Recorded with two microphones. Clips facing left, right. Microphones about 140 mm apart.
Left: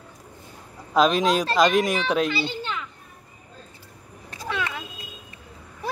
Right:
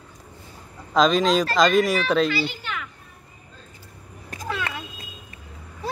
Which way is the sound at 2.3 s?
25° left (ahead or behind).